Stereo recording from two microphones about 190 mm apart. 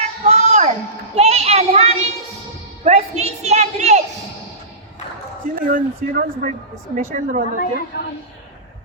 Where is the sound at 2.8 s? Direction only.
35° right (ahead or behind).